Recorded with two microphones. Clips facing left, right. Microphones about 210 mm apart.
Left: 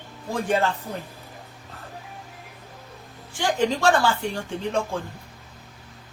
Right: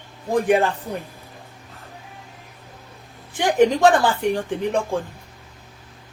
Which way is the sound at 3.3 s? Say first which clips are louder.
Right 6 dB; 20° right (ahead or behind).